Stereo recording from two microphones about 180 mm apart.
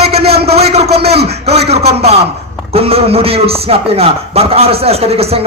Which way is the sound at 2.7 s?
35° right (ahead or behind).